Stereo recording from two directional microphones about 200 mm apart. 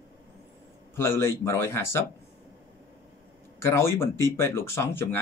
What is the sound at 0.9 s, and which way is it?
Speech, 15° left (ahead or behind).